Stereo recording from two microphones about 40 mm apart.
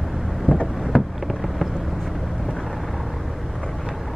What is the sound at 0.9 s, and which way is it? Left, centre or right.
Fireworks, left.